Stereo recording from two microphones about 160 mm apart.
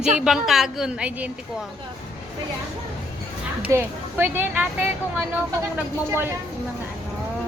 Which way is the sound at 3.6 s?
15° right (ahead or behind).